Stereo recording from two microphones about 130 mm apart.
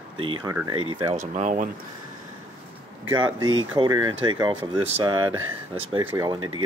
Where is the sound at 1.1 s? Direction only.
70° right (ahead or behind).